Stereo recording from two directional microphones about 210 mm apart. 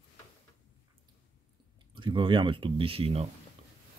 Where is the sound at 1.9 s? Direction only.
20° right (ahead or behind).